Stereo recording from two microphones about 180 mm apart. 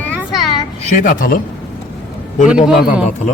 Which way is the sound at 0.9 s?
50° left (ahead or behind).